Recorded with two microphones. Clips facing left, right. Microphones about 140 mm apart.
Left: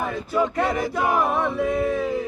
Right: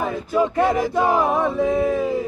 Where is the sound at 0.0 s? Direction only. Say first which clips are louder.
Right 3 dB; 15° right (ahead or behind).